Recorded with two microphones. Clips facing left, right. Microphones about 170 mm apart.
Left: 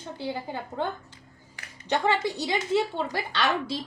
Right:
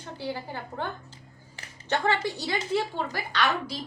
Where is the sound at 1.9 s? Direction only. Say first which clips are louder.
Left 1 dB; 15° left (ahead or behind).